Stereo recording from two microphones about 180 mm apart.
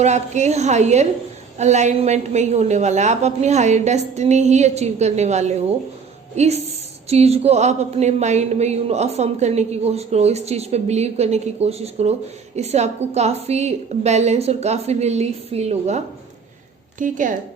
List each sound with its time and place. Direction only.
0.0 s a woman's voice: 40° right (ahead or behind)